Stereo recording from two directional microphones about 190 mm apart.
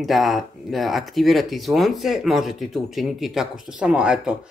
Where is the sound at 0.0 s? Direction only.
Centre (ahead or behind).